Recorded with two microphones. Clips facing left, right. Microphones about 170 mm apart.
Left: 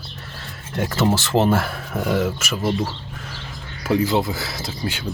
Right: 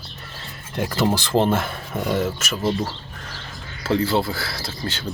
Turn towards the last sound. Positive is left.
turn(degrees=15)  # may be behind; listen again after turning